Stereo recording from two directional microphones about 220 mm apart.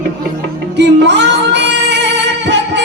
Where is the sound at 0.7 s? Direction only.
50° right (ahead or behind).